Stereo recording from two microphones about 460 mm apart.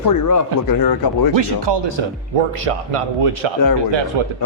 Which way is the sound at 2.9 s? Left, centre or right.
Right.